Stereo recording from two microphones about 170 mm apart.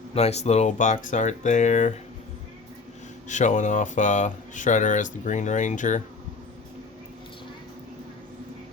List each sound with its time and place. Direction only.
0.1 s speech: 40° left (ahead or behind)
3.2 s speech: 45° left (ahead or behind)